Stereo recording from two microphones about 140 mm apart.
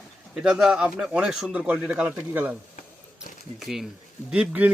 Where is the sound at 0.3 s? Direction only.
5° right (ahead or behind).